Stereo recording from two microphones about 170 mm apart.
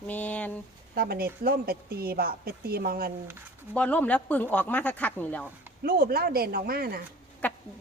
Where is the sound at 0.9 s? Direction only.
65° right (ahead or behind).